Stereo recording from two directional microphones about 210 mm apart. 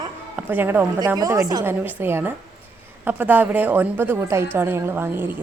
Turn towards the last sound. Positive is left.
turn(degrees=-10)  # may be behind; listen again after turning